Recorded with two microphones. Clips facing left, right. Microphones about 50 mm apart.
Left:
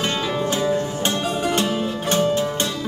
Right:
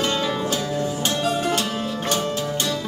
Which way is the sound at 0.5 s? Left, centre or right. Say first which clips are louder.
Left 3 dB; left.